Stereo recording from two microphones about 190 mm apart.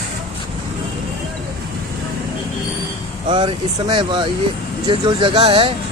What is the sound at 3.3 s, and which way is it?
Speech, 25° right (ahead or behind).